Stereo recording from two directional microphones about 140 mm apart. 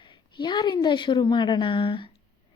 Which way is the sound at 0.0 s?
35° left (ahead or behind).